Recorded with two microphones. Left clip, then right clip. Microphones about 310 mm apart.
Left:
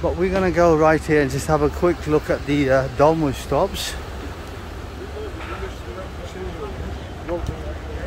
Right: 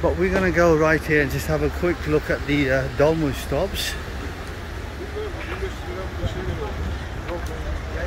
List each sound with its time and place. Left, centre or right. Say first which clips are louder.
0.0 s speech: even; centre